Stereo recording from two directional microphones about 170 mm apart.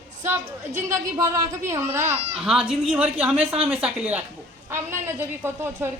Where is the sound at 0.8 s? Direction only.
20° right (ahead or behind).